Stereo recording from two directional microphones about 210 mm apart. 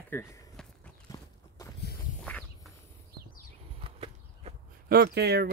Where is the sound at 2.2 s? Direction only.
5° left (ahead or behind).